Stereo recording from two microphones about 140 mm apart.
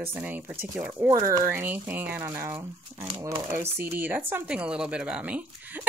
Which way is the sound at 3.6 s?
15° right (ahead or behind).